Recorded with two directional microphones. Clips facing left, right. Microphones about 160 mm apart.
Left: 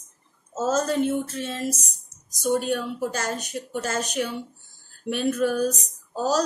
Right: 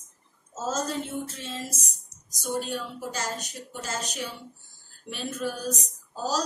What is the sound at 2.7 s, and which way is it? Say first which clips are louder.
Speech: left 7 dB; 60° left (ahead or behind).